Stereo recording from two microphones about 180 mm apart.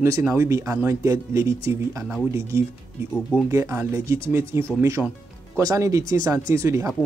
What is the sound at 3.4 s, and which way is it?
Speech, 15° right (ahead or behind).